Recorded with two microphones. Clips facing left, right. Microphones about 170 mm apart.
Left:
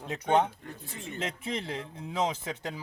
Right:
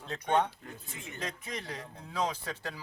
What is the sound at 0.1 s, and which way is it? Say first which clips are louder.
Speech: left 3 dB; 20° left (ahead or behind).